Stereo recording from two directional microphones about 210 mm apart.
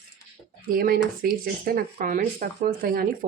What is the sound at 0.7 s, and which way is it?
Speech, 45° right (ahead or behind).